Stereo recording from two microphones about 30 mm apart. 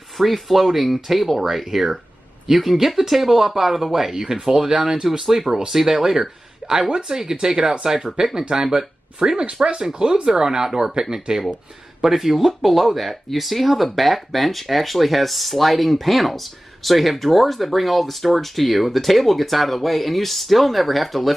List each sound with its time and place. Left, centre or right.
0.2 s speech: centre
5.2 s speech: centre